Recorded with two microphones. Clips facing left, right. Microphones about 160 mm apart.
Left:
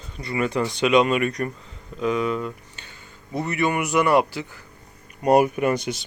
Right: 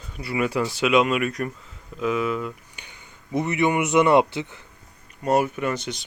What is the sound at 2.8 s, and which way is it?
Speech, 15° right (ahead or behind).